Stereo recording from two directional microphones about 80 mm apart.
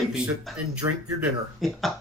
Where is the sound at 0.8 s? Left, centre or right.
Right.